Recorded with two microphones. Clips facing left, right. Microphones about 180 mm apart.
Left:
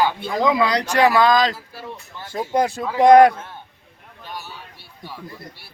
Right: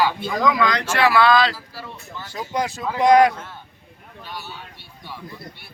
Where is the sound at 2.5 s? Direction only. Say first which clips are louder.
Left 4 dB; 55° left (ahead or behind).